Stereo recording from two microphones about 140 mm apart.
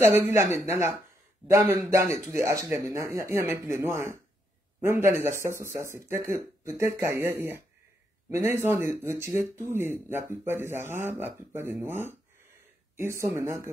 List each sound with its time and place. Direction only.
0.0 s speech: 20° right (ahead or behind)